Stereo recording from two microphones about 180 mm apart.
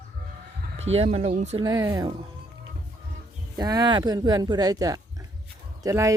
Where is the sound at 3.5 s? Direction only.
20° right (ahead or behind).